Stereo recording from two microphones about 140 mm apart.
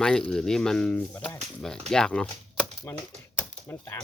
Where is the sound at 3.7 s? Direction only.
15° left (ahead or behind).